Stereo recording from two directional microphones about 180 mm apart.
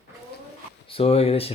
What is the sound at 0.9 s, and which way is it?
Speech, 35° left (ahead or behind).